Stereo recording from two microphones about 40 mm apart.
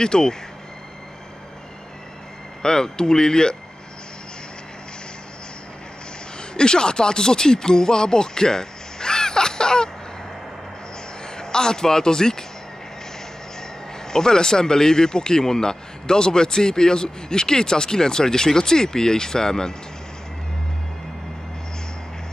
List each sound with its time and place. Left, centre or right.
0.0 s speech: centre
2.6 s speech: centre
6.5 s speech: left
11.2 s speech: centre
13.6 s speech: centre